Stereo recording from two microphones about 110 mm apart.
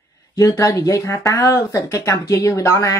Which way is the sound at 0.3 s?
30° left (ahead or behind).